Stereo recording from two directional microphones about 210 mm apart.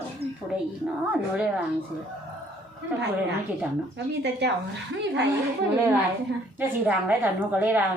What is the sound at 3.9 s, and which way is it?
Speech, 55° right (ahead or behind).